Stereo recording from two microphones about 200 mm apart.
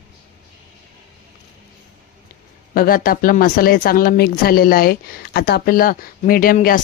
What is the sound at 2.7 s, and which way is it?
A woman's voice, 45° left (ahead or behind).